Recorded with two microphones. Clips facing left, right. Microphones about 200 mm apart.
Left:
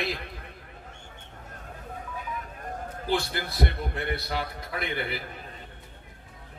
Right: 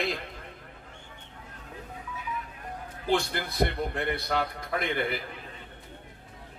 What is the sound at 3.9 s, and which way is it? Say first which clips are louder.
A man's voice: right 2 dB; 50° right (ahead or behind).